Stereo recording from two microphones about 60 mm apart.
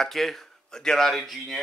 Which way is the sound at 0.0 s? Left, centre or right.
Centre.